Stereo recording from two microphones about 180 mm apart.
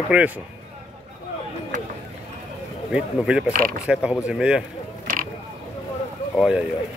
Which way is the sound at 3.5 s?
55° right (ahead or behind).